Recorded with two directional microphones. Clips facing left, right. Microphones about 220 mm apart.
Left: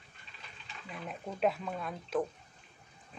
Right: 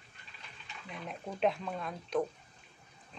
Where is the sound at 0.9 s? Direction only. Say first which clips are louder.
Even; centre (ahead or behind).